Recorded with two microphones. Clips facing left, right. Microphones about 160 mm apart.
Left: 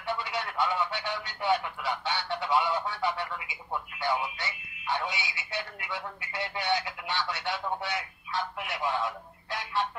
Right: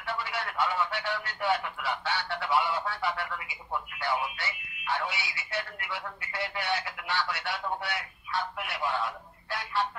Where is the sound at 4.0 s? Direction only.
15° left (ahead or behind).